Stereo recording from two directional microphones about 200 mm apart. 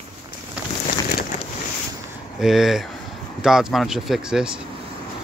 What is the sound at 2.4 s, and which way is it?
Speech, centre (ahead or behind).